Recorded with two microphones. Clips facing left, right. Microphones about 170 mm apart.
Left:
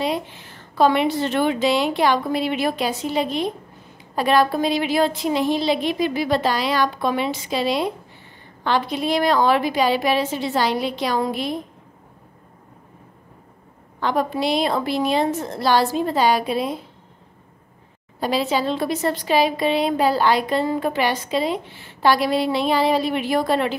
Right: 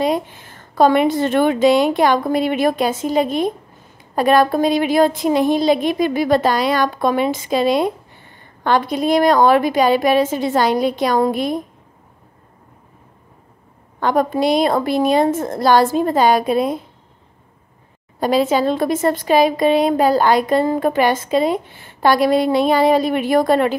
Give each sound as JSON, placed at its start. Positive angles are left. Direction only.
{"t": 0.0, "sound": "a woman's voice", "side_deg": -45}
{"t": 13.9, "sound": "a woman's voice", "side_deg": -50}
{"t": 18.2, "sound": "a woman's voice", "side_deg": -50}